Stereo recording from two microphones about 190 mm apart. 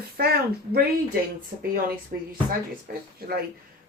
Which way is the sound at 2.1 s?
40° right (ahead or behind).